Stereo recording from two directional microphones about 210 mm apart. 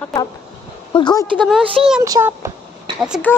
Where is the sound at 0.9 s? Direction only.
20° left (ahead or behind).